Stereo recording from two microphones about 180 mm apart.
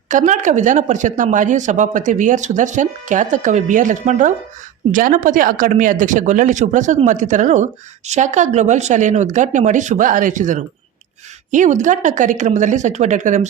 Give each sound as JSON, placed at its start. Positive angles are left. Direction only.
{"t": 0.1, "sound": "speech", "side_deg": -45}